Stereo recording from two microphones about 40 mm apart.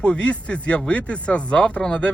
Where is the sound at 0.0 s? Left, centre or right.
Left.